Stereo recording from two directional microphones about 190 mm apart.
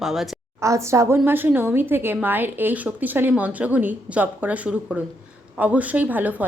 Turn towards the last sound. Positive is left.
turn(degrees=-10)  # may be behind; listen again after turning